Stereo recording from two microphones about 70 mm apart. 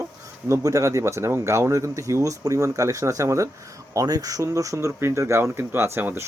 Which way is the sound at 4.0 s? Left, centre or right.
Right.